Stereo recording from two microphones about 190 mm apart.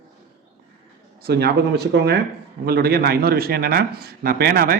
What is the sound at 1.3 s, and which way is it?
Speech, 60° right (ahead or behind).